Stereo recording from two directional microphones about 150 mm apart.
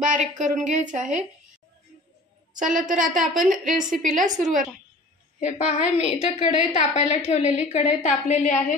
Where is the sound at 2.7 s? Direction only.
60° right (ahead or behind).